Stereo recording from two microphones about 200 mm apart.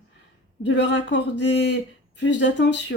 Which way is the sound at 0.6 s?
65° left (ahead or behind).